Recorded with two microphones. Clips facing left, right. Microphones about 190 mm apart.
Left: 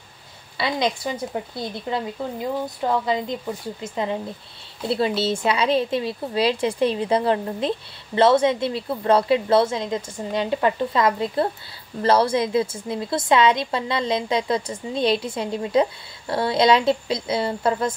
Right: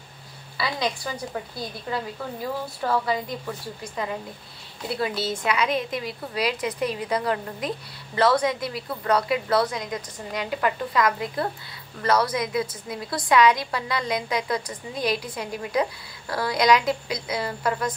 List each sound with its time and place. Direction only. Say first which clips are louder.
0.6 s a woman's voice: left 4 dB; 25° left (ahead or behind)